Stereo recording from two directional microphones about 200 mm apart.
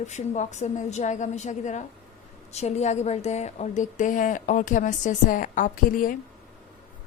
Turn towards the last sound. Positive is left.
turn(degrees=45)  # may be behind; listen again after turning